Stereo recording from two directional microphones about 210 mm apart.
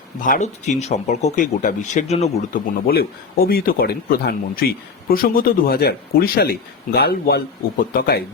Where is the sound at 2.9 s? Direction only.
45° left (ahead or behind).